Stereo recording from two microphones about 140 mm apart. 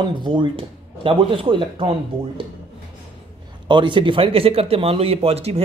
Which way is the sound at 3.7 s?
35° right (ahead or behind).